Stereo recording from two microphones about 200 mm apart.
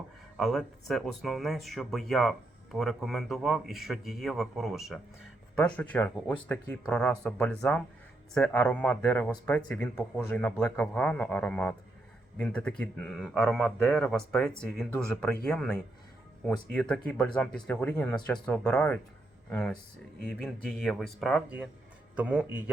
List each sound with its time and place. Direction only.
0.3 s a man's voice: centre (ahead or behind)